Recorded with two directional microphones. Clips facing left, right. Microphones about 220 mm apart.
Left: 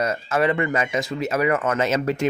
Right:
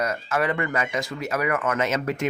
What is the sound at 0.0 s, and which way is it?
Speech, 25° left (ahead or behind).